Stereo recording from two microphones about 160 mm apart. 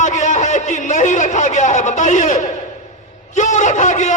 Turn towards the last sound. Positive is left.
turn(degrees=50)  # may be behind; listen again after turning